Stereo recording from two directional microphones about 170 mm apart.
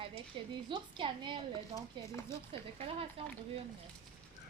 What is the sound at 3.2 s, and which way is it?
Speech, 35° right (ahead or behind).